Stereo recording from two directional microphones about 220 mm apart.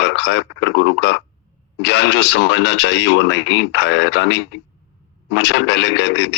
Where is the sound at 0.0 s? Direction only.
55° left (ahead or behind).